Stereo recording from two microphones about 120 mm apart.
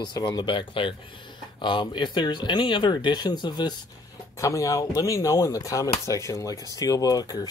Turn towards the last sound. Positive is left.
turn(degrees=30)  # may be behind; listen again after turning